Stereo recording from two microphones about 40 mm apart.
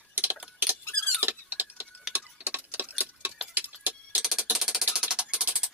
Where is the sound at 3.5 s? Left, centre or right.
Right.